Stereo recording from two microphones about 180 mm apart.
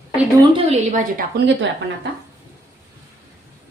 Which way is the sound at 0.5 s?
40° right (ahead or behind).